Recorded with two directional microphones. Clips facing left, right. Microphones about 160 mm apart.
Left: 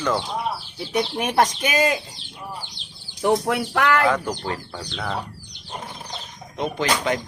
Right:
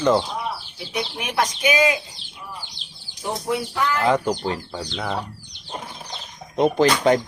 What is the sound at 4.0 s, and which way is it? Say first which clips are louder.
Speech: right 2 dB; 20° right (ahead or behind).